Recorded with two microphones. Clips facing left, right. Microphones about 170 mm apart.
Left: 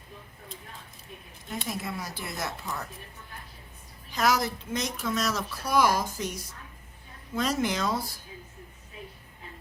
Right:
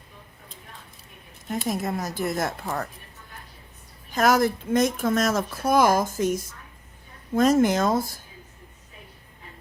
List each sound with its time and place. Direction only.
1.6 s speech: 45° right (ahead or behind)
4.1 s speech: 50° right (ahead or behind)